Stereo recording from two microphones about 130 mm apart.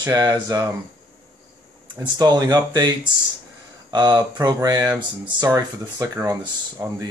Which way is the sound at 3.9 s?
35° right (ahead or behind).